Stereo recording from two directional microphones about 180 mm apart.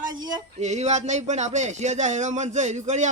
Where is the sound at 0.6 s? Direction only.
40° right (ahead or behind).